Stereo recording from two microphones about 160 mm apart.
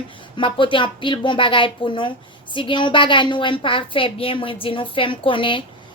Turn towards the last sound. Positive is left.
turn(degrees=30)  # may be behind; listen again after turning